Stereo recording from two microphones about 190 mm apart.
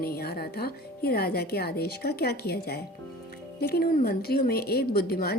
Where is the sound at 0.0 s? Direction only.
55° left (ahead or behind).